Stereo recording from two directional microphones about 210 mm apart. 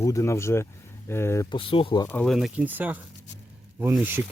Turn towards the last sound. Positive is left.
turn(degrees=-10)  # may be behind; listen again after turning